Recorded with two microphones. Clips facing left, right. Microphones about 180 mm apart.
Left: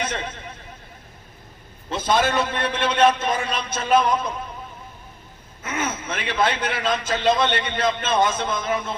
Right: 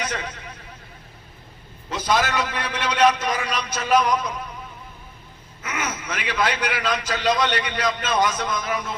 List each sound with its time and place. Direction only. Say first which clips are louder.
0.0 s a man's voice: left 1 dB; 25° left (ahead or behind)
1.9 s a man's voice: left 2 dB; 25° left (ahead or behind)
5.6 s a man's voice: left 2 dB; 25° left (ahead or behind)